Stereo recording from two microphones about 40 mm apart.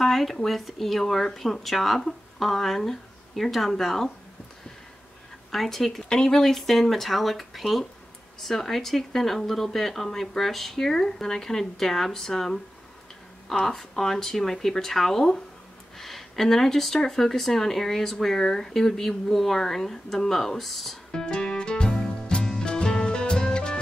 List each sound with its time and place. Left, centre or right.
0.0 s speech: centre
5.5 s speech: centre
21.1 s music: centre